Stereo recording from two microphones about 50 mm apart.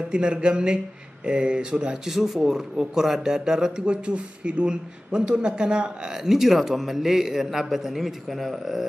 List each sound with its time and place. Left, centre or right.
0.1 s speech: centre